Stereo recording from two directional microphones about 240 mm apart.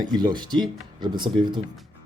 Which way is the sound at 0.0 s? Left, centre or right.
Centre.